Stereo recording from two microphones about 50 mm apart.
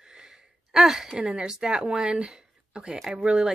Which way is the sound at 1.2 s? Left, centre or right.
Right.